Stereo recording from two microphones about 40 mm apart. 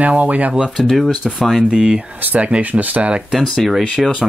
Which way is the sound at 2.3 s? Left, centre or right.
Right.